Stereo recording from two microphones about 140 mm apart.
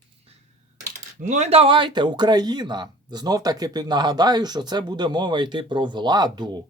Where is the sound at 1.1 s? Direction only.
60° right (ahead or behind).